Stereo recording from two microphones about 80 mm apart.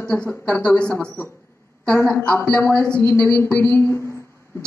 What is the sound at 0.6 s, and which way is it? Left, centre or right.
Speech, centre.